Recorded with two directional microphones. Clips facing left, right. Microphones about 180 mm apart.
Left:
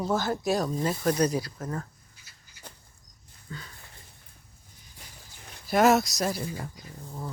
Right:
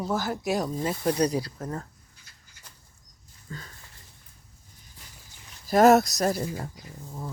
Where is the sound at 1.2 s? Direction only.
30° right (ahead or behind).